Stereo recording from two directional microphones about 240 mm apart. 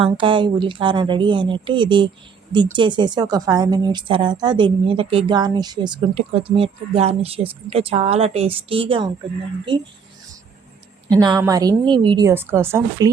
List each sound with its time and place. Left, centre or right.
0.0 s a woman's voice: right
11.1 s a woman's voice: centre